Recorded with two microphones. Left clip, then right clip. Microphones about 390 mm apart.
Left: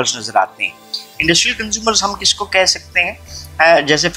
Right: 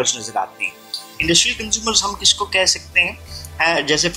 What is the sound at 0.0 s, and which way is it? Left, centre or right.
Speech, centre.